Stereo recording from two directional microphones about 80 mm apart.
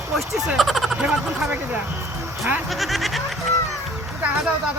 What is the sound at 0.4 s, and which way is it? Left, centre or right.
Speech, centre.